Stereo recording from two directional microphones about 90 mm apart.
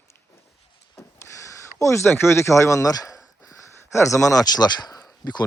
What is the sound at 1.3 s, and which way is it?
Speech, 35° left (ahead or behind).